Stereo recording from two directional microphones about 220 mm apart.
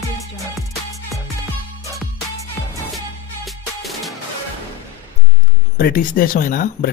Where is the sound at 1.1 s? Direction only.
Centre (ahead or behind).